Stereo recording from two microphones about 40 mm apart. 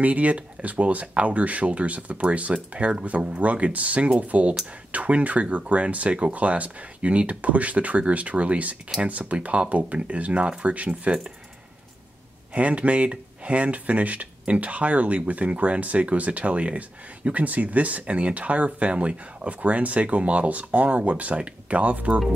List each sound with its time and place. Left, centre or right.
0.0 s speech: right
12.5 s speech: right